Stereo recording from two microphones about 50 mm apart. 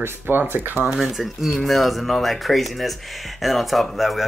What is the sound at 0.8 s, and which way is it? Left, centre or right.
Speech, centre.